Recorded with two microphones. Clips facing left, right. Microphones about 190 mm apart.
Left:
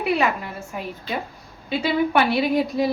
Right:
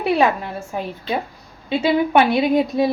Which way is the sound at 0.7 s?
30° right (ahead or behind).